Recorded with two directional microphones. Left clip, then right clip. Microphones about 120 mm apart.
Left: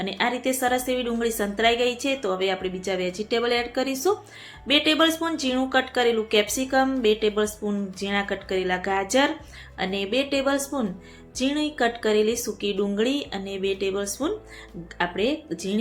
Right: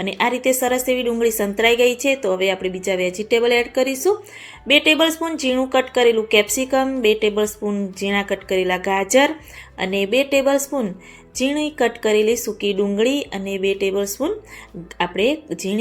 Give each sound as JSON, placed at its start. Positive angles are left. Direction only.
{"t": 0.2, "sound": "speech", "side_deg": -25}